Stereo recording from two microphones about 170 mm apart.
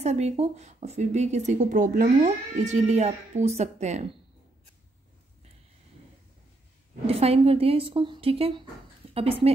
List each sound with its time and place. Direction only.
0.0 s speech: 40° right (ahead or behind)
7.1 s speech: 35° right (ahead or behind)